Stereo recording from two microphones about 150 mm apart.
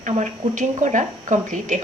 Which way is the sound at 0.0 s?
55° right (ahead or behind).